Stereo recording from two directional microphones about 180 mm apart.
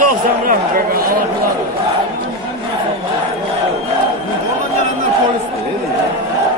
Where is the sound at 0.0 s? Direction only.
50° right (ahead or behind).